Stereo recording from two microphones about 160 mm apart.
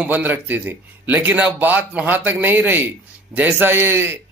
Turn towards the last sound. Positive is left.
turn(degrees=-15)  # may be behind; listen again after turning